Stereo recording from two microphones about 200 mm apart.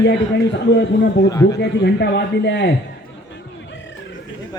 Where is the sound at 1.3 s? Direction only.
15° left (ahead or behind).